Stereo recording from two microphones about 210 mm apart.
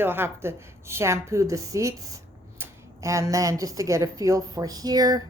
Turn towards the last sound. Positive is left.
turn(degrees=-20)  # may be behind; listen again after turning